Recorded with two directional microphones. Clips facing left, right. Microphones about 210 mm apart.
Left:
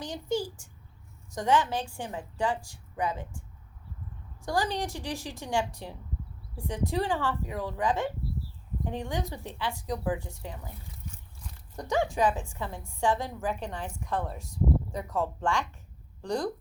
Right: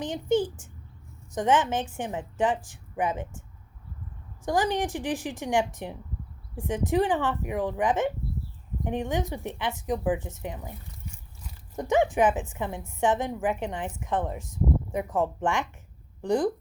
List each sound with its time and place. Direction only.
0.0 s a sound: 20° right (ahead or behind)
1.4 s speech: 20° right (ahead or behind)
4.4 s a woman's voice: 15° right (ahead or behind)
11.8 s a woman's voice: 20° right (ahead or behind)